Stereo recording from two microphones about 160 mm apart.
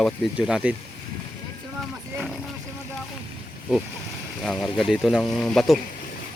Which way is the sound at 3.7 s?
5° right (ahead or behind).